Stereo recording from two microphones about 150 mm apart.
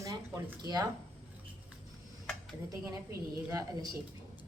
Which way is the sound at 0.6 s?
25° right (ahead or behind).